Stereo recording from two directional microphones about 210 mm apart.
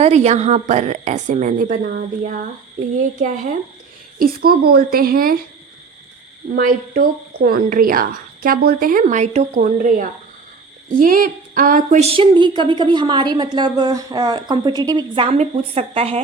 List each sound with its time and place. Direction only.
0.0 s a woman's voice: 30° right (ahead or behind)
6.6 s a woman's voice: 45° right (ahead or behind)